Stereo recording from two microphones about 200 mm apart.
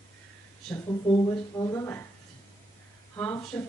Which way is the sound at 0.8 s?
20° left (ahead or behind).